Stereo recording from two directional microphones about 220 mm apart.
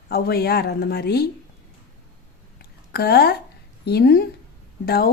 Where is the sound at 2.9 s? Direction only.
45° left (ahead or behind).